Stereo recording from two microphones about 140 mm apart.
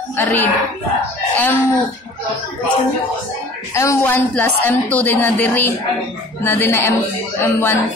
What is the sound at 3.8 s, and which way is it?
A man's voice, 15° left (ahead or behind).